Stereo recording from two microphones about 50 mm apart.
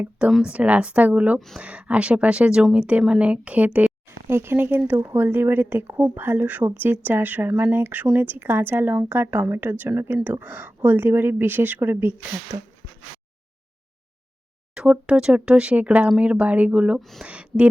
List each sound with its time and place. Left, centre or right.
0.4 s speech: right
4.3 s speech: right
4.5 s speech: right
6.4 s speech: right
6.7 s speech: right
12.5 s speech: right
14.8 s speech: centre
17.0 s speech: centre
17.2 s a sound: right